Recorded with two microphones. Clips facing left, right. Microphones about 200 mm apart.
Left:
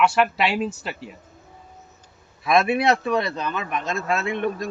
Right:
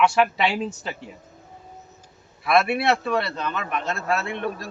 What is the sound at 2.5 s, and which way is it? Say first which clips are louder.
A man's voice: left 1 dB; 15° left (ahead or behind).